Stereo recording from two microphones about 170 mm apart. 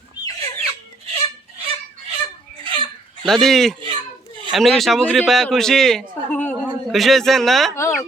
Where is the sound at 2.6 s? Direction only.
30° right (ahead or behind).